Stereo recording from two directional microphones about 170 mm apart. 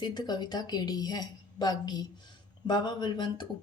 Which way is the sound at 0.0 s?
25° left (ahead or behind).